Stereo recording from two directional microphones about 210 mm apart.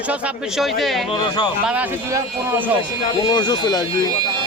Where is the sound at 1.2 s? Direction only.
20° left (ahead or behind).